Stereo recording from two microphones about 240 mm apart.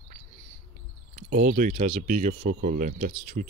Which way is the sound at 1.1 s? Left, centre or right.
Right.